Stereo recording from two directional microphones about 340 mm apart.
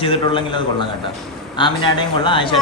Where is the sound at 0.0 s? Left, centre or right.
Centre.